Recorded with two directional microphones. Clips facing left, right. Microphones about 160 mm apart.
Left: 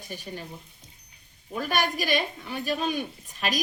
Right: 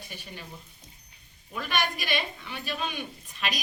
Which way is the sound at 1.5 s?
40° left (ahead or behind).